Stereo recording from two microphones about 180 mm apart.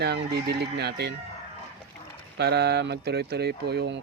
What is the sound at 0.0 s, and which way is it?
Speech, 65° right (ahead or behind).